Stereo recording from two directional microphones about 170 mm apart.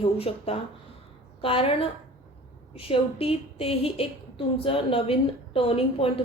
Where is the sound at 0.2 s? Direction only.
35° left (ahead or behind).